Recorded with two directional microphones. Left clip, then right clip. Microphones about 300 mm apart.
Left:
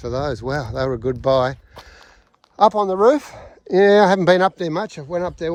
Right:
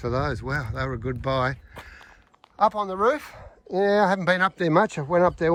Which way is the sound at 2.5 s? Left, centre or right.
Centre.